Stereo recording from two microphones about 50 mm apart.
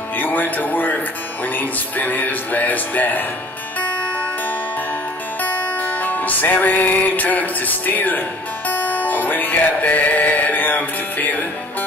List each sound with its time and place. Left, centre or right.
0.1 s music: left